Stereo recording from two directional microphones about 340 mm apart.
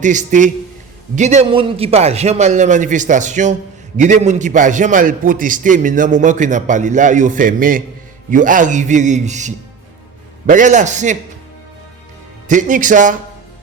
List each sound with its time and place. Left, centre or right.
0.0 s a man's voice: right
12.5 s a man's voice: right